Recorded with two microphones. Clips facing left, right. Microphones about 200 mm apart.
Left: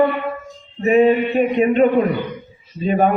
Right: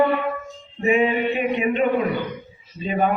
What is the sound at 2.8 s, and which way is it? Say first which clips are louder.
Speech: left 5 dB; 45° left (ahead or behind).